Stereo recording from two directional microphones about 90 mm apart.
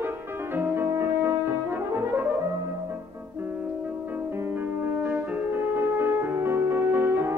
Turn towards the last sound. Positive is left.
turn(degrees=-25)  # may be behind; listen again after turning